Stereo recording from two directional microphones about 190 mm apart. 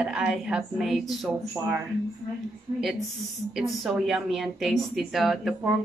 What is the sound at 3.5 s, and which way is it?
A woman's voice, centre (ahead or behind).